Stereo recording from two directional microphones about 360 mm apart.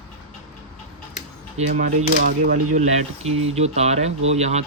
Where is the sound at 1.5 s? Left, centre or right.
Right.